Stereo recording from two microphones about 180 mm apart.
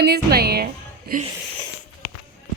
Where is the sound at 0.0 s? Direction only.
60° right (ahead or behind).